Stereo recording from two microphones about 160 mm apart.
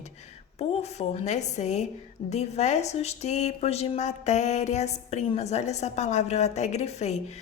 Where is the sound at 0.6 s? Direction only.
40° left (ahead or behind).